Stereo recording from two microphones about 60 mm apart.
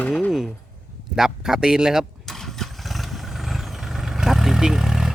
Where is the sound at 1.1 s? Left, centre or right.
Centre.